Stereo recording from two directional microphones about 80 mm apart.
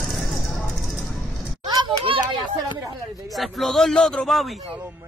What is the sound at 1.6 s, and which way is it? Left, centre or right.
Children playing, right.